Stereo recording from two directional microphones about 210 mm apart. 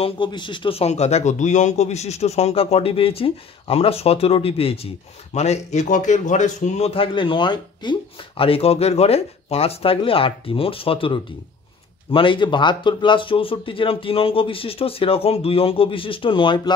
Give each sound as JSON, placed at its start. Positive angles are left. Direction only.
{"t": 0.0, "sound": "a man's voice", "side_deg": 20}